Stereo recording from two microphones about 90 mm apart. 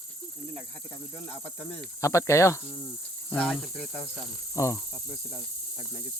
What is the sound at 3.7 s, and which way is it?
Speech, centre (ahead or behind).